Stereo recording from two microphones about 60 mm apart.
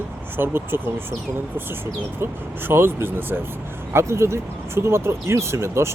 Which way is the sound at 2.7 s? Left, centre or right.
Right.